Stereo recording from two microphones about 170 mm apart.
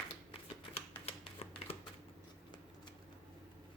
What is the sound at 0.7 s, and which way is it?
Typewriter, 35° left (ahead or behind).